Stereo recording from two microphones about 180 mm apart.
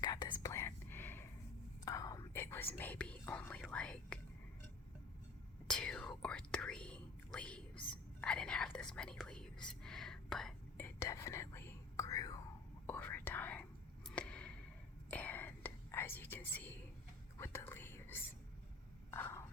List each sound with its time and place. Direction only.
0.0 s whispering: 25° left (ahead or behind); by 4.2 s 5° left (ahead or behind)
5.6 s whispering: 5° left (ahead or behind)
10.8 s whispering: 15° left (ahead or behind)
12.9 s whispering: 10° left (ahead or behind)
14.1 s a sound: 5° left (ahead or behind)
15.1 s whispering: 10° left (ahead or behind)
19.1 s a sound: 10° left (ahead or behind)